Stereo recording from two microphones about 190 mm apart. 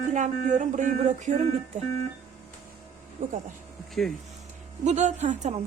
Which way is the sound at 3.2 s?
45° right (ahead or behind).